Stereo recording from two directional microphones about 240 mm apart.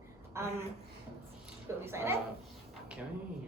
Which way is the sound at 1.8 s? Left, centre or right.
Centre.